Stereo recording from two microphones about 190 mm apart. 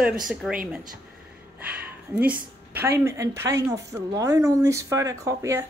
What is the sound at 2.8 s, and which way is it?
A woman's voice, 15° right (ahead or behind).